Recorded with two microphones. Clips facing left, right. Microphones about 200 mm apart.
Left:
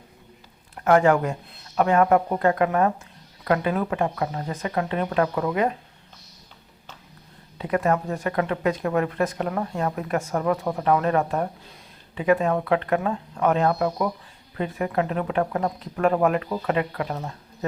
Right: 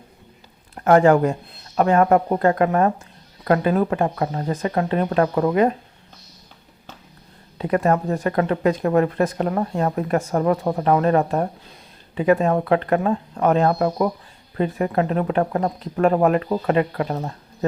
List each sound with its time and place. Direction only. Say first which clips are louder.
0.8 s speech: right 4 dB; 35° right (ahead or behind)
7.6 s speech: right 3 dB; 35° right (ahead or behind)